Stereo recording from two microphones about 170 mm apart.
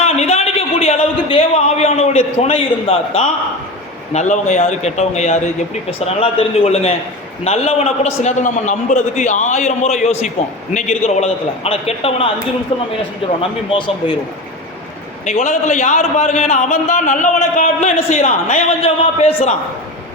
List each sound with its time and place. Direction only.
0.0 s a sound: 40° left (ahead or behind)
4.1 s a man's voice: 45° left (ahead or behind)
13.7 s speech: 30° left (ahead or behind)
15.3 s a man's voice: 45° left (ahead or behind)